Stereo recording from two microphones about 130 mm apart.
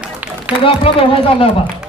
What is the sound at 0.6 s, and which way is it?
Speech, 45° left (ahead or behind).